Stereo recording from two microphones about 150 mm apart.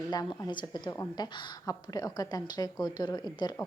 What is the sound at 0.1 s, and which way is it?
Speech, 30° left (ahead or behind).